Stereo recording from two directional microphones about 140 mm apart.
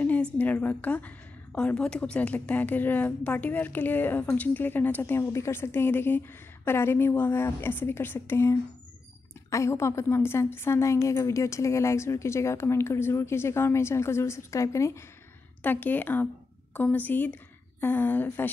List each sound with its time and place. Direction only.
0.0 s a woman's voice: 10° left (ahead or behind)